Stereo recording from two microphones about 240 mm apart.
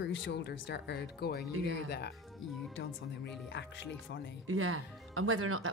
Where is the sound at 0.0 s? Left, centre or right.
Left.